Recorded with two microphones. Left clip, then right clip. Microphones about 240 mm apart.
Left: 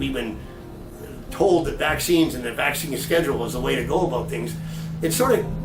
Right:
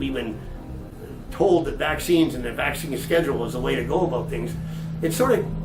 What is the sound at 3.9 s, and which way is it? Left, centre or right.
Speech, right.